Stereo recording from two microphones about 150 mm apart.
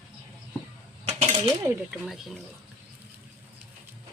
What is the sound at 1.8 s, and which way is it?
Speech, centre (ahead or behind).